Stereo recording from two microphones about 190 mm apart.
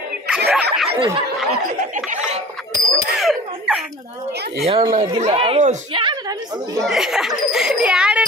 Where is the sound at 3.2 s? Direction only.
Centre (ahead or behind).